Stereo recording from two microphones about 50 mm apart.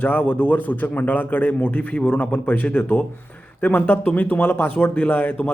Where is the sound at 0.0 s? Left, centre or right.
Left.